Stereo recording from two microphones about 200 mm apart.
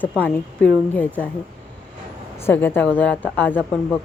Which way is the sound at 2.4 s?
10° left (ahead or behind).